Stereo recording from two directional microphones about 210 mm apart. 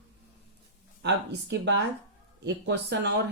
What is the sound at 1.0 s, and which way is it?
Speech, 55° right (ahead or behind).